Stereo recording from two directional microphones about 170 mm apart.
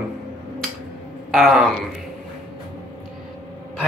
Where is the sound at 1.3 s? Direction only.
Centre (ahead or behind).